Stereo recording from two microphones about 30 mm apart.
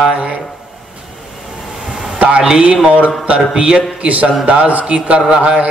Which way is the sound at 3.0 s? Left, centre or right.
Right.